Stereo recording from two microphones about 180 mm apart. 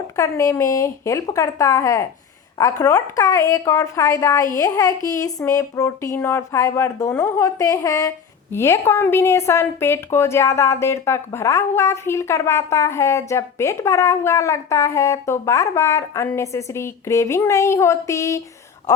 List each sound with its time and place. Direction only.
0.2 s a woman's voice: 15° left (ahead or behind)
2.8 s child singing: 20° left (ahead or behind)
8.5 s a woman's voice: 15° left (ahead or behind)